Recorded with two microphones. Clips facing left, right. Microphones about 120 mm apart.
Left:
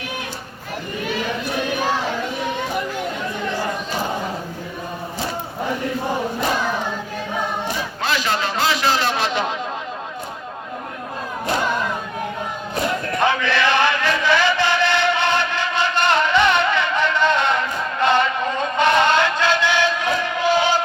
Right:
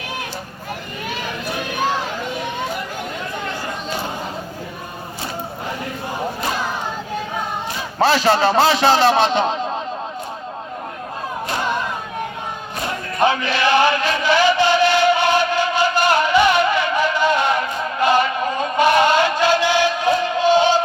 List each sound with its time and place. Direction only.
7.9 s a man's voice: 35° right (ahead or behind)
13.1 s chant: 15° right (ahead or behind)
18.0 s male singing: 10° right (ahead or behind)
20.2 s battle cry: 20° right (ahead or behind)